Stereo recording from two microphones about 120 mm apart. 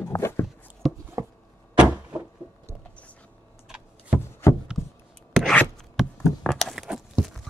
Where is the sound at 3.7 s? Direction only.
5° right (ahead or behind).